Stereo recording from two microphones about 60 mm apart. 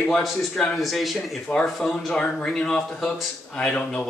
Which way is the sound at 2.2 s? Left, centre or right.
Centre.